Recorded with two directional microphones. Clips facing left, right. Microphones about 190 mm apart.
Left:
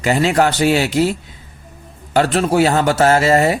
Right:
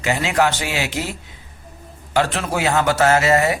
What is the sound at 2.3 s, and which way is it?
Speech, 30° left (ahead or behind).